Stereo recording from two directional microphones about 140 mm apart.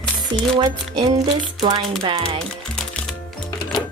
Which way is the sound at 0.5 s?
35° right (ahead or behind).